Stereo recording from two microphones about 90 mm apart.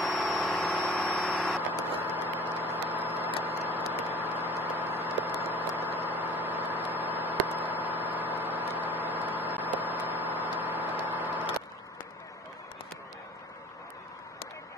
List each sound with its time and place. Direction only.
0.2 s vehicle: centre (ahead or behind)
1.7 s vehicle: 20° right (ahead or behind)